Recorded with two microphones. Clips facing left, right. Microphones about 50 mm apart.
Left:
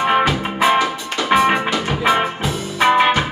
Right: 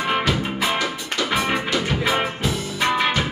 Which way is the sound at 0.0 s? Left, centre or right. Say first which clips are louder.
Left 7 dB; left.